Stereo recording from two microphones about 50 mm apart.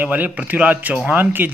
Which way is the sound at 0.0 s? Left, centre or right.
Right.